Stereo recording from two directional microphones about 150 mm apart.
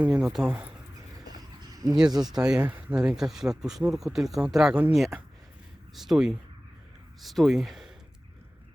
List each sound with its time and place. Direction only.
0.0 s speech: 5° right (ahead or behind)
1.7 s a sound: 25° right (ahead or behind)
2.2 s speech: 5° right (ahead or behind)
2.6 s speech: 15° right (ahead or behind)
2.9 s speech: 5° right (ahead or behind)